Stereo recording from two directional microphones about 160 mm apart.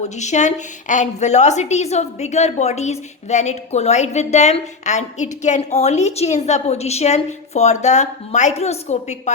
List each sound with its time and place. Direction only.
0.0 s a woman's voice: 45° left (ahead or behind)